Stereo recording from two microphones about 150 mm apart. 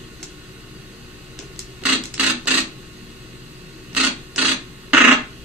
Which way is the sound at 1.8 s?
10° right (ahead or behind).